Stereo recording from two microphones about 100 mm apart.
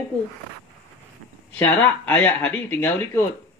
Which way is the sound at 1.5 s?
15° left (ahead or behind).